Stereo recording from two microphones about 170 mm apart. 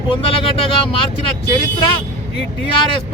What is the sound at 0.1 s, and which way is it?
Speech, 30° left (ahead or behind).